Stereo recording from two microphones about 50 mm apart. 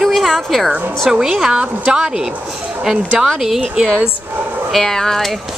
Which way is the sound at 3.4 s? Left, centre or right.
Centre.